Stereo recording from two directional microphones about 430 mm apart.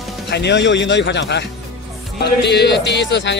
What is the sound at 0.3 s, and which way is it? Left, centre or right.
Speech, left.